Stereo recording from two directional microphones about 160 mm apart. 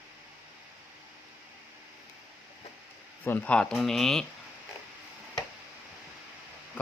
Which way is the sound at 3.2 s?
10° left (ahead or behind).